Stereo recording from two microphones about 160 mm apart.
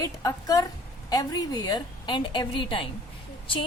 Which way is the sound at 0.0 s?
20° left (ahead or behind).